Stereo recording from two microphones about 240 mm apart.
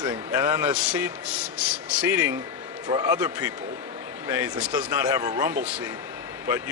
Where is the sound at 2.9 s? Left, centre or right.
Centre.